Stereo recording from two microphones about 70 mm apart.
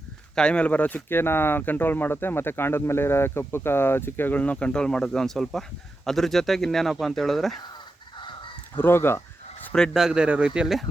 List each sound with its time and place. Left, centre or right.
0.3 s speech: centre
8.7 s a sound: left
9.9 s speech: centre
10.2 s speech: centre